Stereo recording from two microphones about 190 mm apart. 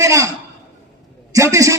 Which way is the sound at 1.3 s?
15° right (ahead or behind).